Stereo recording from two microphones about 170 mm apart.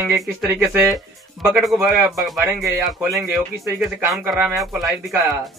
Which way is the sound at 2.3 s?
15° right (ahead or behind).